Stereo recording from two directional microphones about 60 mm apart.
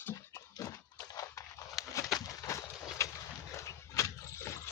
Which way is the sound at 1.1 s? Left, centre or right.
Left.